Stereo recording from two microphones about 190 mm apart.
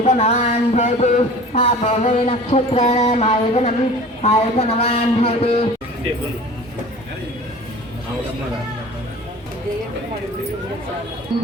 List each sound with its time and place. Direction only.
0.0 s speech: 35° left (ahead or behind)